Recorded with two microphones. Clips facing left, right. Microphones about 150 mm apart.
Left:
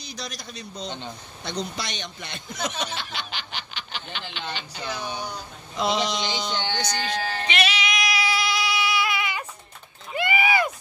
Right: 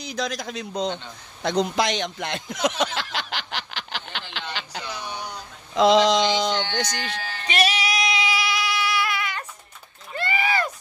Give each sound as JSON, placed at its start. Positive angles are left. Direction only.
{"t": 1.4, "sound": "speech", "side_deg": -90}
{"t": 4.8, "sound": "speech", "side_deg": 25}
{"t": 5.8, "sound": "a sound", "side_deg": -90}
{"t": 6.7, "sound": "speech", "side_deg": -60}
{"t": 7.2, "sound": "music", "side_deg": 40}
{"t": 7.4, "sound": "music", "side_deg": -40}
{"t": 8.4, "sound": "a sound", "side_deg": -5}